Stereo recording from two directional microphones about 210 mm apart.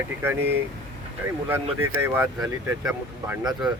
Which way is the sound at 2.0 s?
10° right (ahead or behind).